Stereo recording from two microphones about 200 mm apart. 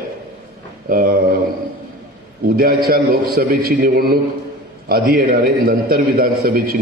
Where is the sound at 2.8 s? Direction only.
50° right (ahead or behind).